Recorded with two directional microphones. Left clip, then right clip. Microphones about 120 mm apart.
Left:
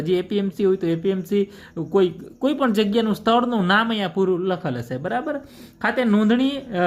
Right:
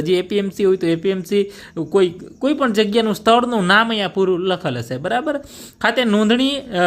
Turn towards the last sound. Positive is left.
turn(degrees=-35)  # may be behind; listen again after turning